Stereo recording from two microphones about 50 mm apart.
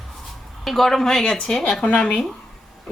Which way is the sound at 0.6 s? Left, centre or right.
Centre.